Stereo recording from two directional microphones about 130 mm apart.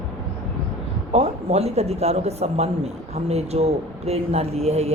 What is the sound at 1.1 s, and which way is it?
Speech, 50° right (ahead or behind).